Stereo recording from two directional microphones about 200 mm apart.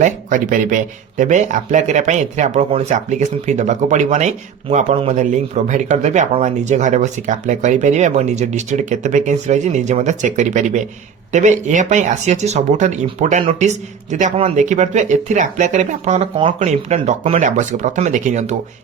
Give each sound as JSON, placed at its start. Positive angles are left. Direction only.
{"t": 0.0, "sound": "speech", "side_deg": -40}